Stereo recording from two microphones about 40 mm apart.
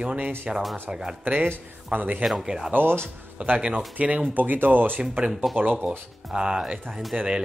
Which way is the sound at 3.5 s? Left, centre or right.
Right.